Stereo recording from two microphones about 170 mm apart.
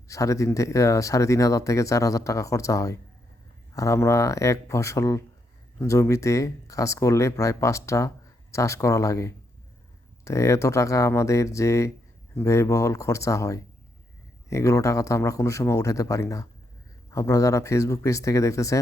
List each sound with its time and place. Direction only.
0.1 s speech: 20° left (ahead or behind)